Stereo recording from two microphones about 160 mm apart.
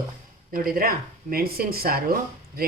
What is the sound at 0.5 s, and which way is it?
Speech, 65° right (ahead or behind).